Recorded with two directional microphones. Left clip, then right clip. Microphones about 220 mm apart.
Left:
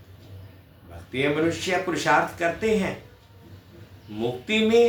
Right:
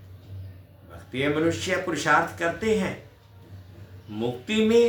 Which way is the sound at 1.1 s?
15° right (ahead or behind).